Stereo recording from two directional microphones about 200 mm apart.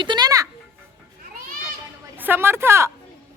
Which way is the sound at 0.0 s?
20° right (ahead or behind).